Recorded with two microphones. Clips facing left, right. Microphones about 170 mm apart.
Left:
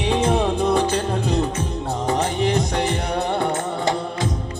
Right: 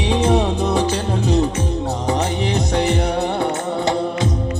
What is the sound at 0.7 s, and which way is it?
Music, 50° left (ahead or behind).